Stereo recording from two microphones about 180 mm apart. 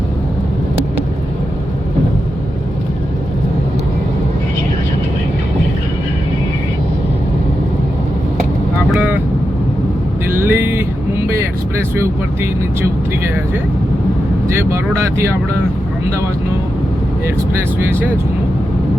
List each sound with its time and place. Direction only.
8.9 s vehicle: 10° right (ahead or behind)
10.2 s vehicle: 10° right (ahead or behind)
14.4 s speech: 15° right (ahead or behind)